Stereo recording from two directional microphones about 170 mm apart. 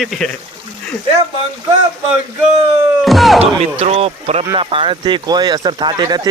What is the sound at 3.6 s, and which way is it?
Speech, 40° right (ahead or behind).